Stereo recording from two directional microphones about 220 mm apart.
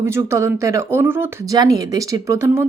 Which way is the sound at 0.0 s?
10° right (ahead or behind).